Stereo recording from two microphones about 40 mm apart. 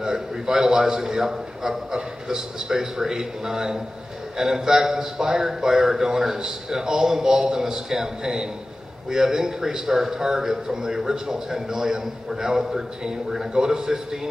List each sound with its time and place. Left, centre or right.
0.0 s a man's voice: centre